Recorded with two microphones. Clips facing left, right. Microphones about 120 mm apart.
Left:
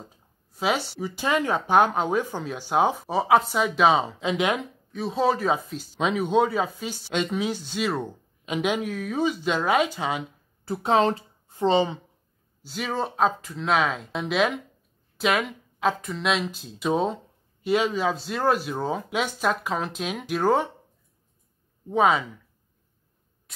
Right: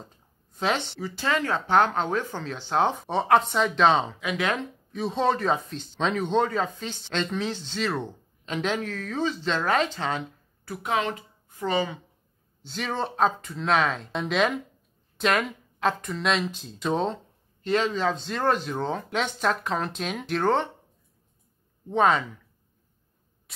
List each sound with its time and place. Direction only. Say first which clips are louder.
0.0 s speech: left 1 dB; 5° left (ahead or behind)
4.2 s speech: left 4 dB; 25° left (ahead or behind)
4.6 s speech: right 1 dB; centre (ahead or behind)
10.6 s speech: left 6 dB; 30° left (ahead or behind)
12.6 s speech: left 1 dB; 5° left (ahead or behind)
21.8 s speech: left 1 dB; 5° left (ahead or behind)